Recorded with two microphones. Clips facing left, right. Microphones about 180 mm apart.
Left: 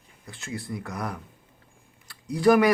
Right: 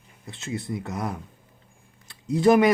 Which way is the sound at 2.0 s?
25° right (ahead or behind).